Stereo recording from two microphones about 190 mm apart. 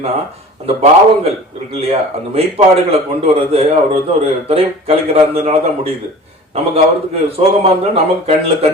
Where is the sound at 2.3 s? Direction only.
30° right (ahead or behind).